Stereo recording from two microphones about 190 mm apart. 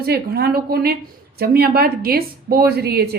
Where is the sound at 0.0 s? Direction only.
55° right (ahead or behind).